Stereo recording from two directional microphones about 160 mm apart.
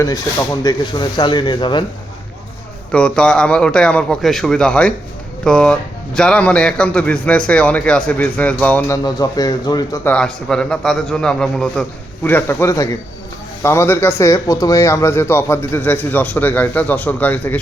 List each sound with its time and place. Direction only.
0.0 s speech: 25° left (ahead or behind)
2.9 s a man's voice: 5° left (ahead or behind)
9.0 s speech: 25° left (ahead or behind)
10.1 s a man's voice: 5° left (ahead or behind)